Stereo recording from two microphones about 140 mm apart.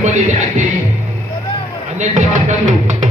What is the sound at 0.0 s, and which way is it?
Speech, 60° right (ahead or behind).